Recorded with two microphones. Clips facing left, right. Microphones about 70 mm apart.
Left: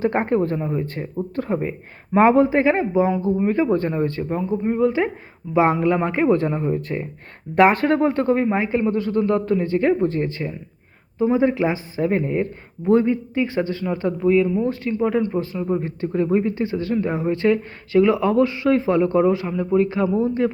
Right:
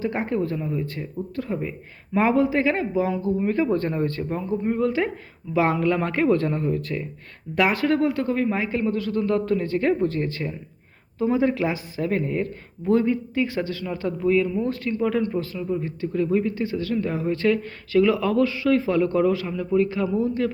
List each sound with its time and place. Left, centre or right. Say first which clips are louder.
0.0 s speech: left 5 dB; left
6.8 s speech: left 2 dB; left